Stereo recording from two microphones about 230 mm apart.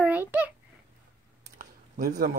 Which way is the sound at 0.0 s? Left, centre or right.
Centre.